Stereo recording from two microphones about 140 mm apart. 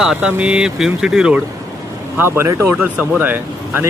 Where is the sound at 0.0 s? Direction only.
5° right (ahead or behind).